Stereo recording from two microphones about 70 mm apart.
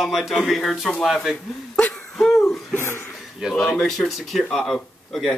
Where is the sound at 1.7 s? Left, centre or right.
Centre.